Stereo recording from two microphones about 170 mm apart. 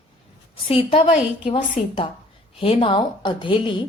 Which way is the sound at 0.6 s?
35° left (ahead or behind).